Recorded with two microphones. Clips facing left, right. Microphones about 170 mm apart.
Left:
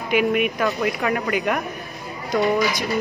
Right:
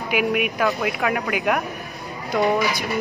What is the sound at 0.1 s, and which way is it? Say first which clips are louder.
Speech: left 3 dB; 5° right (ahead or behind).